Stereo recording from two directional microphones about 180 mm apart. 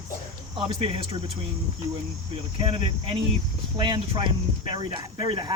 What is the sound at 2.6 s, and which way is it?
Speech, 30° right (ahead or behind).